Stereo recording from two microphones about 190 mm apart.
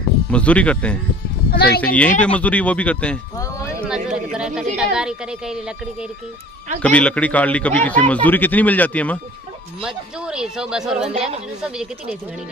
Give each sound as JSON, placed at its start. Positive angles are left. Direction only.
{"t": 0.3, "sound": "a man's voice", "side_deg": 5}
{"t": 1.5, "sound": "speech", "side_deg": 55}
{"t": 2.0, "sound": "a man's voice", "side_deg": 5}
{"t": 3.8, "sound": "a sound", "side_deg": -5}
{"t": 4.7, "sound": "a man's voice", "side_deg": -5}
{"t": 9.8, "sound": "speech", "side_deg": -5}